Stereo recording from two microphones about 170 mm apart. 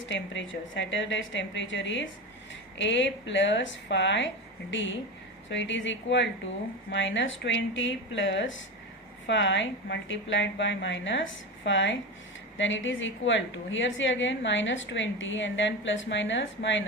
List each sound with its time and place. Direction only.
0.0 s a woman's voice: 90° left